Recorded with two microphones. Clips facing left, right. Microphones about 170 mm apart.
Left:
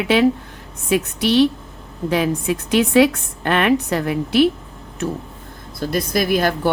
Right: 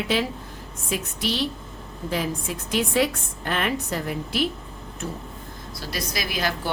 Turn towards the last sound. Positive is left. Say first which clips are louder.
# left 10 dB
turn(degrees=50)  # may be behind; listen again after turning